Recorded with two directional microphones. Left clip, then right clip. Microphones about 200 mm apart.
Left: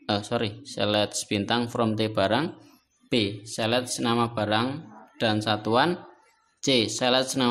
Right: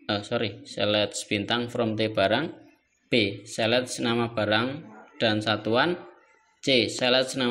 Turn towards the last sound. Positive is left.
turn(degrees=20)  # may be behind; listen again after turning